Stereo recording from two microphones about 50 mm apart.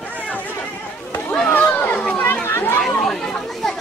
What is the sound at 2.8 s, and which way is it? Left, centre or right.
Chatter, centre.